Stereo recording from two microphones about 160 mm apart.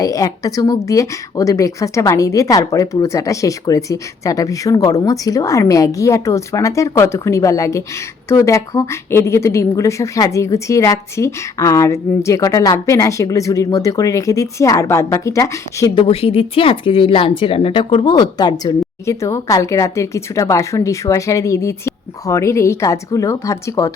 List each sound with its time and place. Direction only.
0.0 s a woman's voice: 20° left (ahead or behind)
16.0 s a woman's voice: 35° left (ahead or behind); by 23.9 s 20° left (ahead or behind)